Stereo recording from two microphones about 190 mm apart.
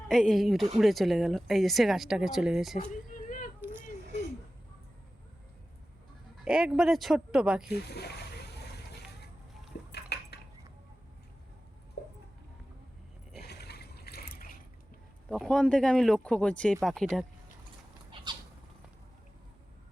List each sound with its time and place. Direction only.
0.1 s speech: centre (ahead or behind)
2.7 s a sound: 45° left (ahead or behind)
6.4 s speech: 5° right (ahead or behind)
7.7 s speech: 60° left (ahead or behind)
9.9 s dishes: 60° left (ahead or behind)
12.0 s a sound: 55° left (ahead or behind)
13.4 s mechanisms: 60° left (ahead or behind)
15.3 s speech: centre (ahead or behind)